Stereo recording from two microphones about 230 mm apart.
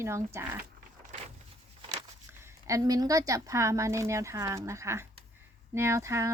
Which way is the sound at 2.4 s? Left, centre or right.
Centre.